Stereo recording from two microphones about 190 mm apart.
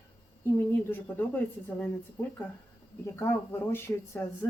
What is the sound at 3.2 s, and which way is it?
Speech, 10° left (ahead or behind).